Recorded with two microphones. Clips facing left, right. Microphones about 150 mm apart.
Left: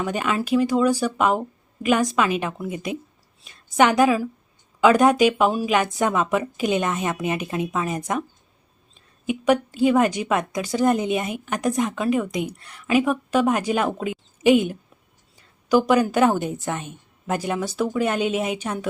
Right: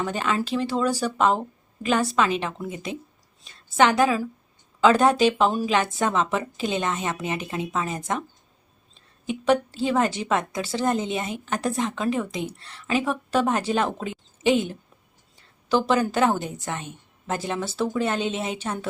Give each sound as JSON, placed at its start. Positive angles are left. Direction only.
{"t": 0.0, "sound": "a woman's voice", "side_deg": 10}
{"t": 9.2, "sound": "speech", "side_deg": 10}